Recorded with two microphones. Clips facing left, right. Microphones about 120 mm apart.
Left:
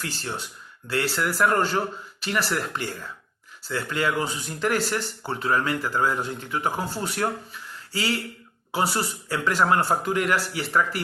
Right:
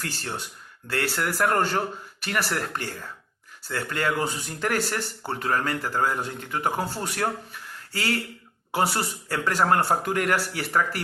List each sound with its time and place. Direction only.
0.0 s speech: 45° right (ahead or behind)